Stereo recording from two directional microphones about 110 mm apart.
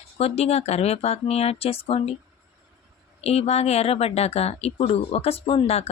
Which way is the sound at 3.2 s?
70° left (ahead or behind).